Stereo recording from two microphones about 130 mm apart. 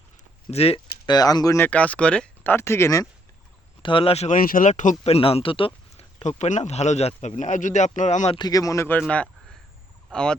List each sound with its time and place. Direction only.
0.5 s speech: 50° left (ahead or behind)
1.0 s speech: 30° left (ahead or behind)
1.5 s speech: 15° left (ahead or behind)
3.8 s speech: 45° left (ahead or behind)
4.3 s speech: 80° left
5.0 s speech: 50° left (ahead or behind)
6.2 s speech: 65° left (ahead or behind)
8.4 s speech: 30° left (ahead or behind)
9.0 s speech: 10° left (ahead or behind)